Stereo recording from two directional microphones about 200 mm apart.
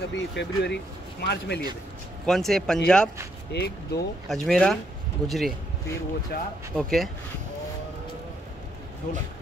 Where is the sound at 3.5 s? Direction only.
55° left (ahead or behind).